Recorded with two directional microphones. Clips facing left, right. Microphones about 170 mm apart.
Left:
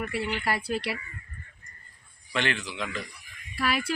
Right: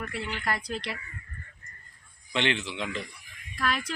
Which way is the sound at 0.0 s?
10° left (ahead or behind).